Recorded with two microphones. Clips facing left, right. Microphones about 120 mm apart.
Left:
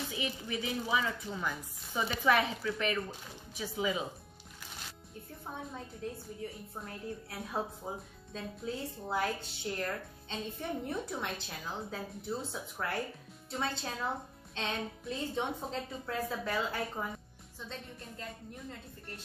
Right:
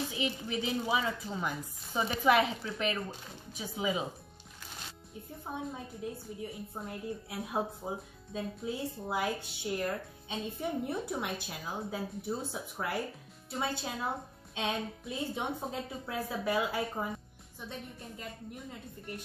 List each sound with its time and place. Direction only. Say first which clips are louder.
0.2 s a woman's voice: right 3 dB; 20° right (ahead or behind)
5.5 s speech: right 4 dB; 10° right (ahead or behind)